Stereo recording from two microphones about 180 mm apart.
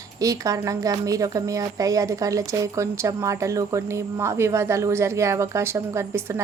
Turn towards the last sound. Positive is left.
turn(degrees=-15)  # may be behind; listen again after turning